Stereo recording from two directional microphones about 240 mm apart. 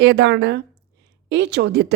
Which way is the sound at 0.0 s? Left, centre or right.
Right.